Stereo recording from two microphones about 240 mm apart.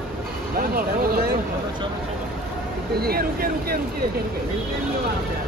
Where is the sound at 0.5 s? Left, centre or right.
Right.